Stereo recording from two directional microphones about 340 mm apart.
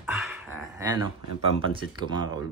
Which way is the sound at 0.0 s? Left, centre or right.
Centre.